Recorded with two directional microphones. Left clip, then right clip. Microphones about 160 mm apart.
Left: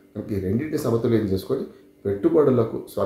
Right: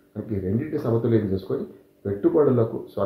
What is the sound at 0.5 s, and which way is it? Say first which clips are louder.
Speech: left 1 dB; 15° left (ahead or behind).